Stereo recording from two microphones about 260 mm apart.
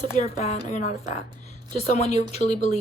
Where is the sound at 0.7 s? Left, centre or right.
Left.